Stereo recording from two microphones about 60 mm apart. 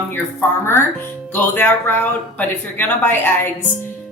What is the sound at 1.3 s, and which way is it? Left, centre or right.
A woman's voice, left.